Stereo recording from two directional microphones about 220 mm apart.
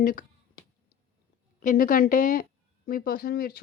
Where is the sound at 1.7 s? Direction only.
40° left (ahead or behind).